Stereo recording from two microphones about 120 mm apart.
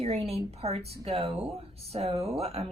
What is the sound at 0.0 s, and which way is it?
A woman's voice, 60° right (ahead or behind).